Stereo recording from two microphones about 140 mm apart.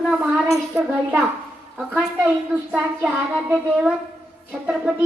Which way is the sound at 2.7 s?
10° right (ahead or behind).